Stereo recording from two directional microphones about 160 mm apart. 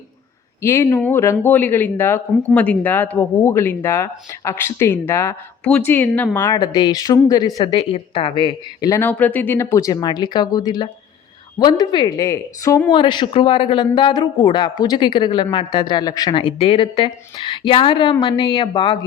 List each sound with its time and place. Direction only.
0.6 s a woman's voice: 15° left (ahead or behind); by 8.9 s 30° left (ahead or behind)
8.9 s a woman's voice: 10° left (ahead or behind); by 18.9 s 30° left (ahead or behind)